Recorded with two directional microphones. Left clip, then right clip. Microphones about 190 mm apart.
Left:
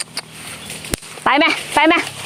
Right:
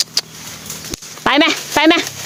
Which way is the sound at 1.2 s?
35° right (ahead or behind).